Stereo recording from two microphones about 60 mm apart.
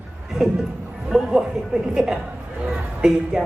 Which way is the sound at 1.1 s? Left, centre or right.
Centre.